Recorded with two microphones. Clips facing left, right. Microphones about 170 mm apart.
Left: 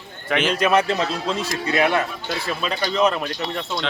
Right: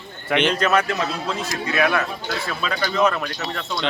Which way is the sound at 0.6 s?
15° left (ahead or behind).